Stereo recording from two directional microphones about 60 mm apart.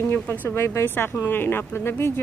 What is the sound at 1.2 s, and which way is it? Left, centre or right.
Speech, left.